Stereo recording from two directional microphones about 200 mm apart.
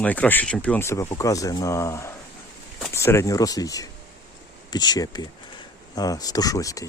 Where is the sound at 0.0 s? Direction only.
5° left (ahead or behind).